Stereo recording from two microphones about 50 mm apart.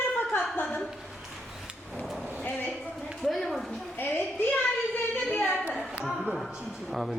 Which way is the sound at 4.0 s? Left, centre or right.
Left.